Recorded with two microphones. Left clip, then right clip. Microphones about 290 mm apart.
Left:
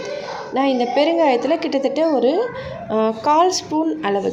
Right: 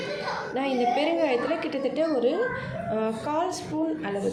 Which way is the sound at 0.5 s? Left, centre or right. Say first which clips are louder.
Left 8 dB; centre.